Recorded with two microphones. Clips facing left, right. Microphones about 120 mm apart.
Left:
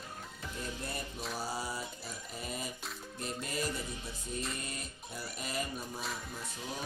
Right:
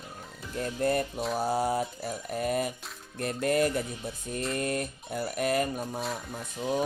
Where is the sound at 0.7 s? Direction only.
60° right (ahead or behind).